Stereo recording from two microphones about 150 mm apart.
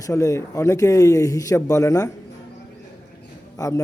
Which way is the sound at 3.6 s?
25° left (ahead or behind).